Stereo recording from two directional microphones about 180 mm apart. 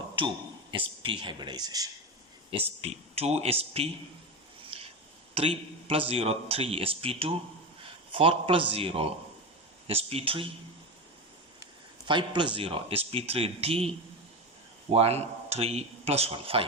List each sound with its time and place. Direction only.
0.7 s a man's voice: 30° right (ahead or behind)
2.5 s speech: 35° right (ahead or behind)
4.7 s chop: 30° right (ahead or behind)
5.3 s a man's voice: 30° right (ahead or behind)
12.0 s a man's voice: 25° right (ahead or behind)